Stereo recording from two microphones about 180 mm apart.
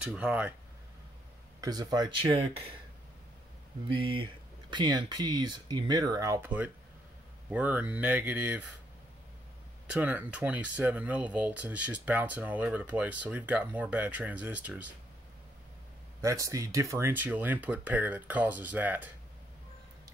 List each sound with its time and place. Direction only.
0.0 s speech: 5° right (ahead or behind)
1.6 s speech: 20° right (ahead or behind)
3.9 s speech: 30° right (ahead or behind); by 8.6 s 10° right (ahead or behind)
9.9 s speech: 10° right (ahead or behind)
16.2 s speech: 15° right (ahead or behind)